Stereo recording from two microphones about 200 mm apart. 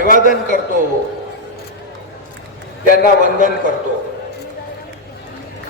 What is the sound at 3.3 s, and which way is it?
Speech, 40° right (ahead or behind).